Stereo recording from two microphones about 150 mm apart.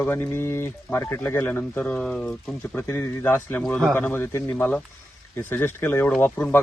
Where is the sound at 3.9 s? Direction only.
15° left (ahead or behind).